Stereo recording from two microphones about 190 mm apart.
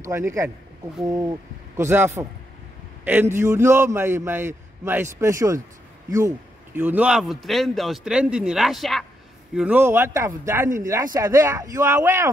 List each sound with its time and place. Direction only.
0.0 s a man's voice: 15° right (ahead or behind)
1.8 s a man's voice: 10° right (ahead or behind)